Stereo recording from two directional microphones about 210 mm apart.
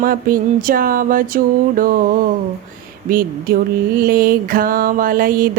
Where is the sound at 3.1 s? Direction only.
45° right (ahead or behind).